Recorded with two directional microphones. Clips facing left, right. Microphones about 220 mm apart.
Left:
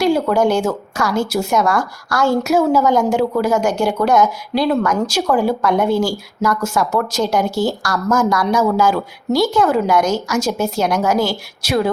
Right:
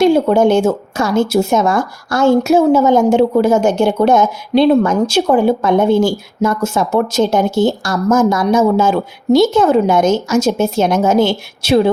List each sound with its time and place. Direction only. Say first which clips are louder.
0.0 s speech: right 5 dB; 25° right (ahead or behind)